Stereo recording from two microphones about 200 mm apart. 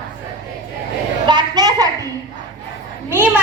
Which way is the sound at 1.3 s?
20° right (ahead or behind).